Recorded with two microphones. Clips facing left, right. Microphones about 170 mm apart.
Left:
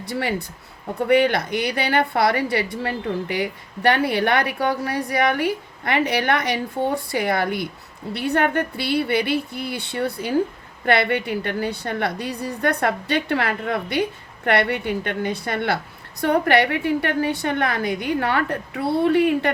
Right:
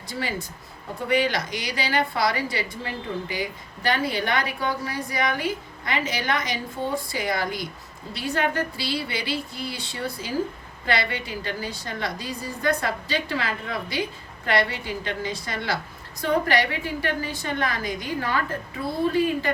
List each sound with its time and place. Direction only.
0.0 s a woman's voice: 60° left (ahead or behind)